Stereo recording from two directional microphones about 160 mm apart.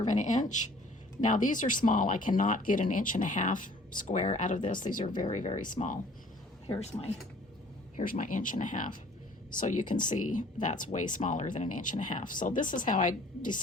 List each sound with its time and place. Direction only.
0.0 s speech: 50° left (ahead or behind)
6.7 s speech: 40° left (ahead or behind)
7.9 s speech: 55° left (ahead or behind)